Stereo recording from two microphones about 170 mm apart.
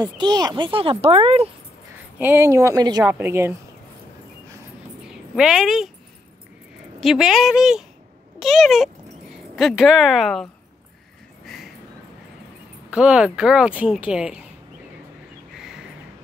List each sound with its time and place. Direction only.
0.0 s speech: 25° right (ahead or behind)
2.1 s a woman's voice: 10° right (ahead or behind)
5.3 s a woman's voice: 5° right (ahead or behind)
7.0 s a woman's voice: centre (ahead or behind)
11.4 s a sound: centre (ahead or behind)
12.9 s a woman's voice: 5° right (ahead or behind)